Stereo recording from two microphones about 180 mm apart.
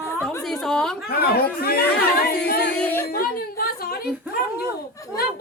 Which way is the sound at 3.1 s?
55° left (ahead or behind).